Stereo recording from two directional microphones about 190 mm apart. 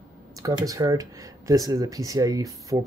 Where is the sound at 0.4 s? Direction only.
15° right (ahead or behind).